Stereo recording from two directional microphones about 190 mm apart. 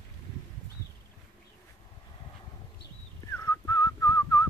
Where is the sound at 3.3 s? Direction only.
15° left (ahead or behind).